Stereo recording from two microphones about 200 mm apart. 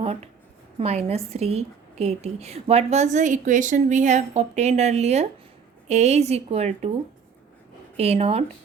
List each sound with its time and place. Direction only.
0.8 s a woman's voice: 30° right (ahead or behind)
7.9 s a woman's voice: 30° right (ahead or behind)